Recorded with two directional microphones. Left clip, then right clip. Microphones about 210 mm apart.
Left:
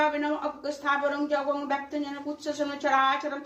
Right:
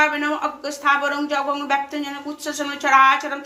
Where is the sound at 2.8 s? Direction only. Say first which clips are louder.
Right 10 dB; 15° left (ahead or behind).